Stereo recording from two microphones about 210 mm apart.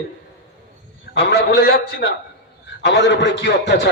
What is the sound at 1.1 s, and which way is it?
Speech, 50° left (ahead or behind).